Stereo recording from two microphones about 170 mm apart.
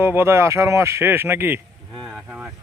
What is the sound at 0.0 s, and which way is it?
Speech, 15° right (ahead or behind).